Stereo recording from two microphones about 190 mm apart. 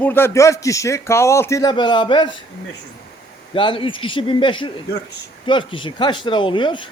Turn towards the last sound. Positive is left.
turn(degrees=25)  # may be behind; listen again after turning